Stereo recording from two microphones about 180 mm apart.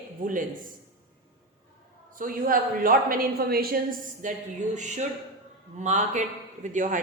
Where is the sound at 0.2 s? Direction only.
45° right (ahead or behind).